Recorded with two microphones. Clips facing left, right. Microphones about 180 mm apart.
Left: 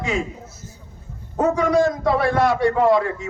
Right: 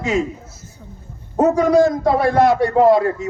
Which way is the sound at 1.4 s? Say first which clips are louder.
Right 4 dB; 40° right (ahead or behind).